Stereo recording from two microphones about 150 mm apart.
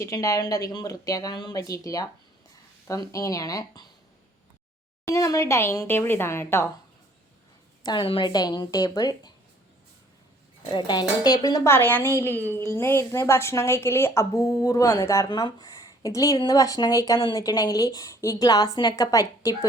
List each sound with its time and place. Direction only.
0.0 s a woman's voice: 20° left (ahead or behind)
5.1 s a woman's voice: 20° left (ahead or behind)
7.9 s a woman's voice: 35° left (ahead or behind)
10.7 s a woman's voice: 30° left (ahead or behind)